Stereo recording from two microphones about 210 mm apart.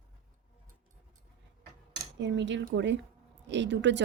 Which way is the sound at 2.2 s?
60° right (ahead or behind).